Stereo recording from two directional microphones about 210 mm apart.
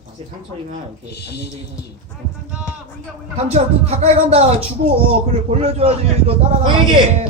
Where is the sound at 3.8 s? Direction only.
30° right (ahead or behind).